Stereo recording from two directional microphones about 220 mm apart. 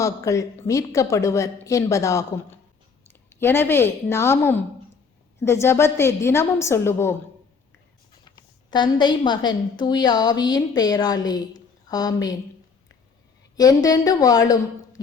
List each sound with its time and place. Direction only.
0.0 s a woman's voice: 15° left (ahead or behind)
8.4 s a woman's voice: 20° left (ahead or behind)
13.6 s a woman's voice: 15° left (ahead or behind)